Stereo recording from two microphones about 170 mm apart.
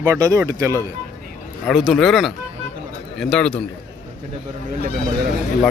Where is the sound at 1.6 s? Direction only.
Centre (ahead or behind).